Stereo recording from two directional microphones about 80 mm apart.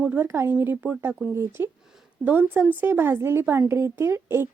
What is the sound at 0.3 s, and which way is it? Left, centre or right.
A woman's voice, right.